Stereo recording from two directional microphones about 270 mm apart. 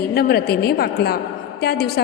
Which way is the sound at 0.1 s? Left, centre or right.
Left.